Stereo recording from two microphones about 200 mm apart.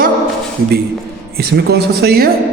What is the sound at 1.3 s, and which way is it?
Speech, 55° right (ahead or behind).